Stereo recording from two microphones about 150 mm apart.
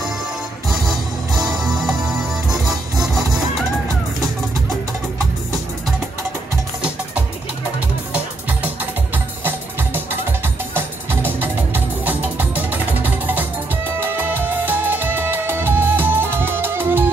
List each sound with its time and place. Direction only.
0.7 s music: centre (ahead or behind)
8.1 s music: 10° right (ahead or behind)